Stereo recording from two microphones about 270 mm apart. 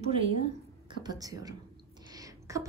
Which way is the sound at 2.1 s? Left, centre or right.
Centre.